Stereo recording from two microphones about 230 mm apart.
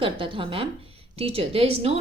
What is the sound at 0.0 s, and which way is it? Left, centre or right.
A woman's voice, right.